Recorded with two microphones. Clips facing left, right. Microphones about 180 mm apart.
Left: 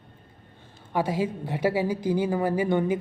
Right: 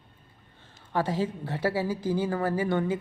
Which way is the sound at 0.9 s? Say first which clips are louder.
Left 2 dB; 10° left (ahead or behind).